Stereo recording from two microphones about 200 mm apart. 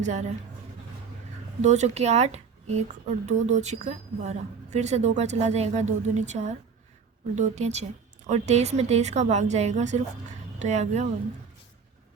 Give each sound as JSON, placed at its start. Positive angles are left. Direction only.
{"t": 0.0, "sound": "a woman's voice", "side_deg": -35}
{"t": 1.6, "sound": "a woman's voice", "side_deg": -35}